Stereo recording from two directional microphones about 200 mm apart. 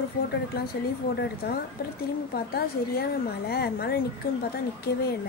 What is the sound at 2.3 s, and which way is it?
A woman's voice, 50° left (ahead or behind).